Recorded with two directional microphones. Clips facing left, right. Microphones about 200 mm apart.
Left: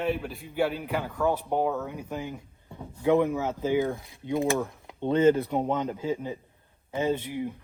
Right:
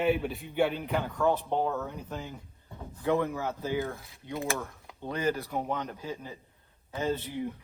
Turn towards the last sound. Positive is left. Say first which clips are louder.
# left 4 dB
turn(degrees=15)  # may be behind; listen again after turning